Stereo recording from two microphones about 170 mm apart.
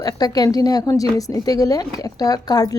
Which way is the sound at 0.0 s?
20° left (ahead or behind).